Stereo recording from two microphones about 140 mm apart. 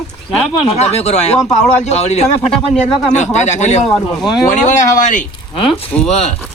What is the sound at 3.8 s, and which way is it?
Speech, centre (ahead or behind).